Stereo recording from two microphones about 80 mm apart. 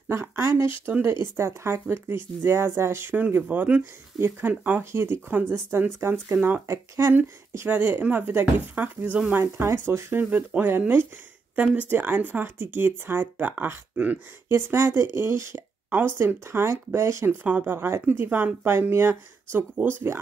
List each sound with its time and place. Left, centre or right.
0.1 s speech: right
7.6 s speech: right
9.4 s speech: right
14.5 s speech: right; by 17.7 s centre
17.7 s speech: right